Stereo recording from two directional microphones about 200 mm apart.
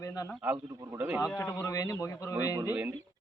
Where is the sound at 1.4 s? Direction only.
15° left (ahead or behind).